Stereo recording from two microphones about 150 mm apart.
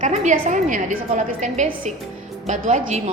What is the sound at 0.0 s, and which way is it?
A woman's voice, 55° right (ahead or behind).